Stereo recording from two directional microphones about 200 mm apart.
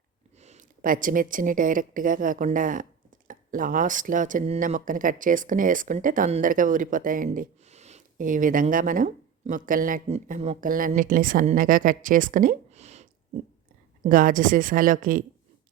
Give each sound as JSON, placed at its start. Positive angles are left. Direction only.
{"t": 0.3, "sound": "a woman's voice", "side_deg": -35}